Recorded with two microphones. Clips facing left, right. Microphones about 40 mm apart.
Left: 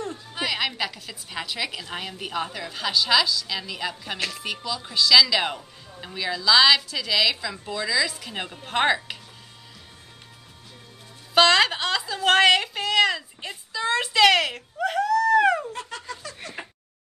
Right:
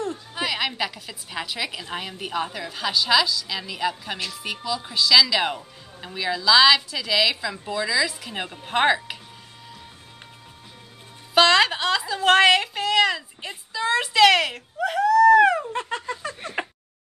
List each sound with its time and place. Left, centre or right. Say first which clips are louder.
0.0 s a woman's voice: right 2 dB; centre
11.3 s a woman's voice: right 1 dB; centre
15.7 s a sound: right 6 dB; right